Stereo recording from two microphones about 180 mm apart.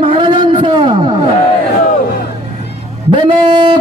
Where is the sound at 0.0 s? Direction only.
30° right (ahead or behind).